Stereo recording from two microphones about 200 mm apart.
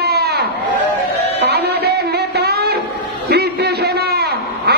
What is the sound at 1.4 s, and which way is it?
Music, 55° right (ahead or behind).